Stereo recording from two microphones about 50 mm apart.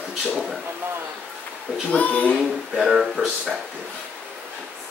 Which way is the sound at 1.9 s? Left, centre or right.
Left.